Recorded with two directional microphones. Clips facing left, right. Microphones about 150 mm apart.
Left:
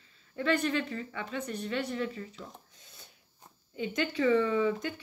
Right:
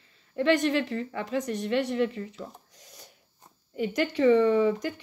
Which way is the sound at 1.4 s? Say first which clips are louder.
Right 5 dB; 90° right.